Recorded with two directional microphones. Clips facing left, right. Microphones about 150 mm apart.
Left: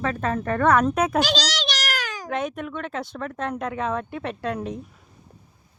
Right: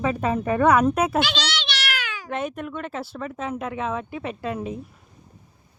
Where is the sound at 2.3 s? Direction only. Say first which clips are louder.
Even; centre (ahead or behind).